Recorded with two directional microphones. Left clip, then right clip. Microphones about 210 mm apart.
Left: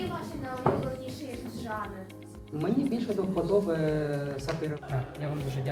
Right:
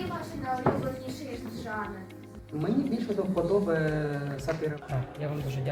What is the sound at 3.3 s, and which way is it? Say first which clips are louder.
Speech: right 1 dB; 30° right (ahead or behind).